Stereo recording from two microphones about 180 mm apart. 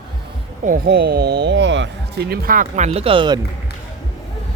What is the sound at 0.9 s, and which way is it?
Speech, 65° right (ahead or behind).